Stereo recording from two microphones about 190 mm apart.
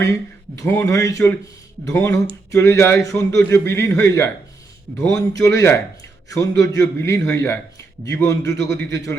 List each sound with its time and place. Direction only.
0.6 s a man's voice: 15° left (ahead or behind)